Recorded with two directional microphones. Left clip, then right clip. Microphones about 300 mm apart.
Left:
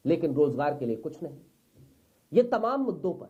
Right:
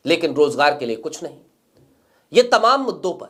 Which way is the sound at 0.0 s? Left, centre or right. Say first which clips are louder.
Right 8 dB; centre.